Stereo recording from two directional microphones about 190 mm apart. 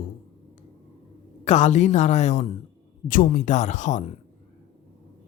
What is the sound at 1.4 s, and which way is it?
Speech, 35° left (ahead or behind).